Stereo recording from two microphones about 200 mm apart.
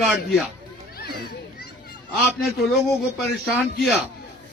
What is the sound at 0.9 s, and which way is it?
Children playing, 50° left (ahead or behind).